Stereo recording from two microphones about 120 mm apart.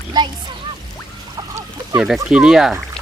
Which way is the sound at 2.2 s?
5° right (ahead or behind).